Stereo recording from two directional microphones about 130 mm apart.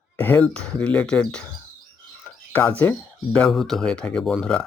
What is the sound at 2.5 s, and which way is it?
Speech, 15° left (ahead or behind).